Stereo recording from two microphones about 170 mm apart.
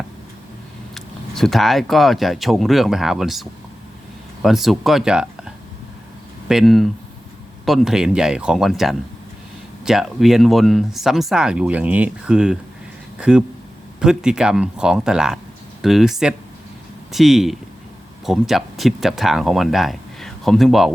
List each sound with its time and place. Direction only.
0.9 s speech: centre (ahead or behind)
4.4 s speech: centre (ahead or behind)